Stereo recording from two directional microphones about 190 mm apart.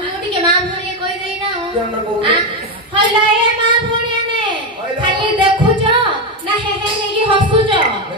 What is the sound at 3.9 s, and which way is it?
Child singing, 25° right (ahead or behind).